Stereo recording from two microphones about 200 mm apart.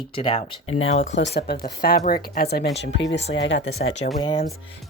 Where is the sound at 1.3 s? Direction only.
50° left (ahead or behind).